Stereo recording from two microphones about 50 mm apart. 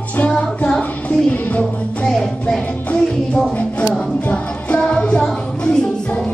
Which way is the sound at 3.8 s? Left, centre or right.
Left.